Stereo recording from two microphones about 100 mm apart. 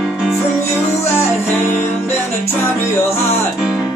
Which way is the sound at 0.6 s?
25° left (ahead or behind).